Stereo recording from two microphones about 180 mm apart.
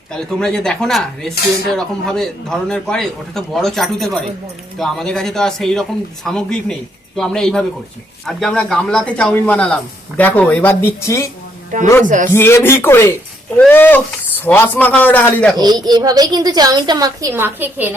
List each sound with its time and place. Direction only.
0.1 s a man's voice: 5° left (ahead or behind)
12.0 s speech: 45° right (ahead or behind)
12.3 s speech: 15° left (ahead or behind)
15.5 s a woman's voice: 20° right (ahead or behind)